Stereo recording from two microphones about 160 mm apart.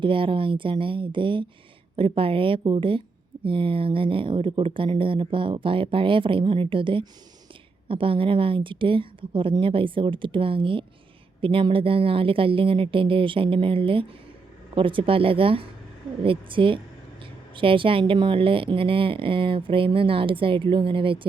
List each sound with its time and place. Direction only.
0.0 s speech: 30° right (ahead or behind)